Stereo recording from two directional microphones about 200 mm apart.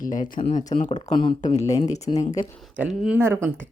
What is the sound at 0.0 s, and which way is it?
Speech, 40° left (ahead or behind).